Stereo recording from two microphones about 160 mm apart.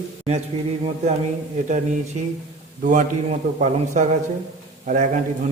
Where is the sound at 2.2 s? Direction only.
45° right (ahead or behind).